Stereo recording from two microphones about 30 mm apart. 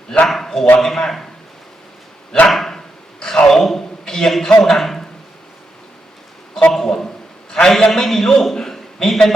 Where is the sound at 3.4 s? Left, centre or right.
Centre.